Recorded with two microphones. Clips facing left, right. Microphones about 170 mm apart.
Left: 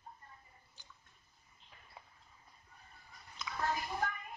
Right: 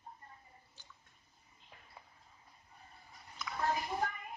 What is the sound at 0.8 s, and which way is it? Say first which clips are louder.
Drip: left 2 dB; 15° left (ahead or behind).